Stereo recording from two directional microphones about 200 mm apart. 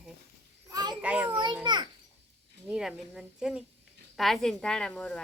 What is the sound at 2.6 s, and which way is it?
Speech, centre (ahead or behind).